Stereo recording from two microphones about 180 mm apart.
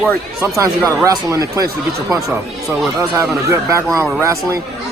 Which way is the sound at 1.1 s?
20° right (ahead or behind).